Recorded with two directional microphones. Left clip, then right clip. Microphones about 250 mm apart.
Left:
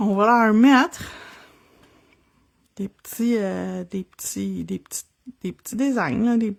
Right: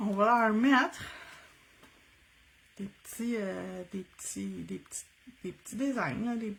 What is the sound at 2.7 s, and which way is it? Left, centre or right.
Speech, left.